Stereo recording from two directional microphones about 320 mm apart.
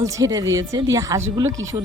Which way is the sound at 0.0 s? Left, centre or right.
Centre.